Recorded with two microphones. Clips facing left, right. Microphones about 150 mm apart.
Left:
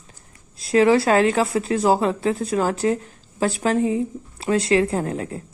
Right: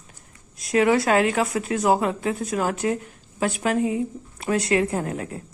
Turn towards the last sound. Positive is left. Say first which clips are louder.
# left 3 dB
turn(degrees=30)  # may be behind; listen again after turning